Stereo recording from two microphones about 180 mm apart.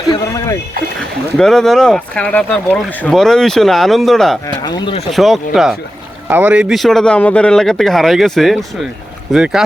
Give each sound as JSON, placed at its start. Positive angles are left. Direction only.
{"t": 0.3, "sound": "a sound", "side_deg": 15}
{"t": 1.4, "sound": "speech", "side_deg": 0}
{"t": 4.4, "sound": "speech", "side_deg": 20}
{"t": 5.1, "sound": "speech", "side_deg": 0}